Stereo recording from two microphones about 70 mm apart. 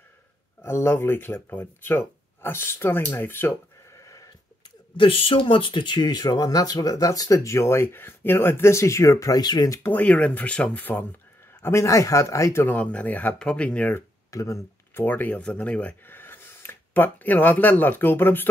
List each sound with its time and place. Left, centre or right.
0.6 s speech: left
5.9 s speech: left
9.4 s speech: left
9.8 s speech: left
11.6 s speech: left
12.6 s speech: centre
14.3 s speech: left
15.0 s speech: left